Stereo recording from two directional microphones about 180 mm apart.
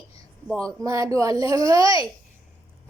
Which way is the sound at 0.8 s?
20° right (ahead or behind).